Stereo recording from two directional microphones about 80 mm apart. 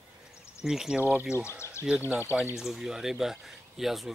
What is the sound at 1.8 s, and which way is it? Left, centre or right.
Speech, right.